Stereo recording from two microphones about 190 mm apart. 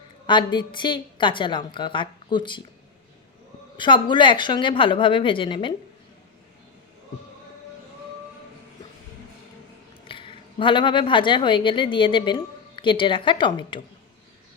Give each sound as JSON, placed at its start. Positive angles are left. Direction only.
{"t": 0.3, "sound": "a woman's voice", "side_deg": 25}
{"t": 3.8, "sound": "a woman's voice", "side_deg": 25}
{"t": 10.1, "sound": "a woman's voice", "side_deg": 25}